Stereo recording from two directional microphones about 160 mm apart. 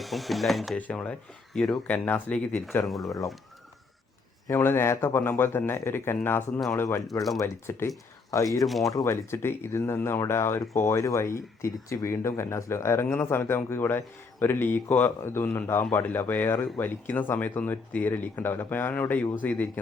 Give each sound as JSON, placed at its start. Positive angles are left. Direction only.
{"t": 0.0, "sound": "speech", "side_deg": 0}
{"t": 4.4, "sound": "speech", "side_deg": 15}